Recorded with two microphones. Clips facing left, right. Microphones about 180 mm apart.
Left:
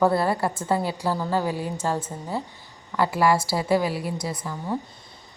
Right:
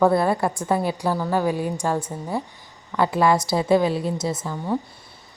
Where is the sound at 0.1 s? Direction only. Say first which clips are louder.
Right 3 dB; 15° right (ahead or behind).